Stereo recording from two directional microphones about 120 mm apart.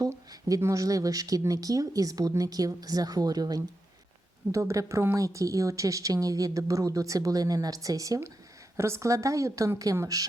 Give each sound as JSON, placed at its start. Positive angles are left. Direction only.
{"t": 0.0, "sound": "a woman's voice", "side_deg": -30}